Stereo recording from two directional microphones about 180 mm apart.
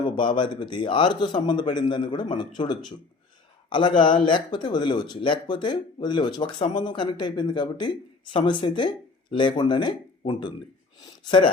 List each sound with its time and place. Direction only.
0.3 s speech: 25° left (ahead or behind)